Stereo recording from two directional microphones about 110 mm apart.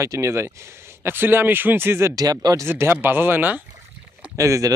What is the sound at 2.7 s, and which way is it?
Speech, 20° right (ahead or behind).